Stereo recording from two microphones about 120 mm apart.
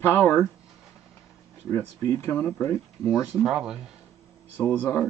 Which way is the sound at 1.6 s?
20° left (ahead or behind).